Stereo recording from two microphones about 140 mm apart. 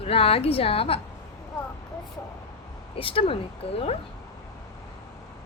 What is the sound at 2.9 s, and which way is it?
Speech, 40° left (ahead or behind).